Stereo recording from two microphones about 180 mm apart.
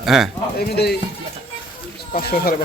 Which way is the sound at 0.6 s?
65° left (ahead or behind).